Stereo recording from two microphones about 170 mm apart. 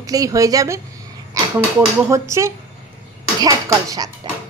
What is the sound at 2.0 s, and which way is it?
A child's voice, 15° right (ahead or behind).